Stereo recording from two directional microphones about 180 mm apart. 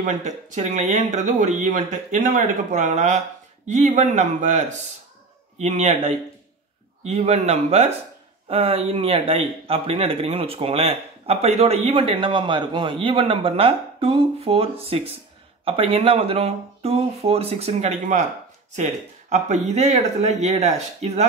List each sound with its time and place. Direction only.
0.0 s speech: 40° right (ahead or behind)